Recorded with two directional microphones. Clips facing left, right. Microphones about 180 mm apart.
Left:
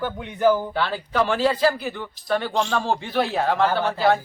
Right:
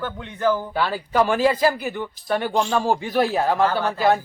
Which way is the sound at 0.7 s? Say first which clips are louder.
Right 2 dB; 10° right (ahead or behind).